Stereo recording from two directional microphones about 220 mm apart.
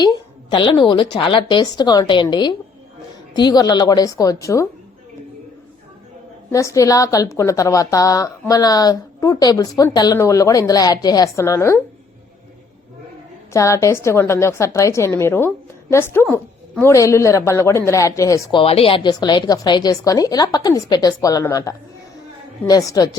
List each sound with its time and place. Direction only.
0.5 s a woman's voice: 20° left (ahead or behind)
6.5 s a woman's voice: 15° left (ahead or behind)
13.5 s a woman's voice: 15° left (ahead or behind)
18.6 s a woman's voice: 25° left (ahead or behind)